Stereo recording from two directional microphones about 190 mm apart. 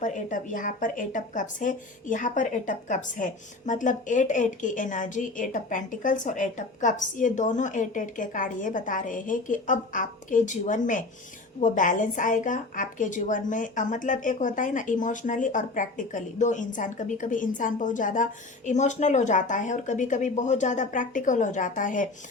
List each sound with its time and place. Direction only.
0.0 s a woman's voice: 40° left (ahead or behind)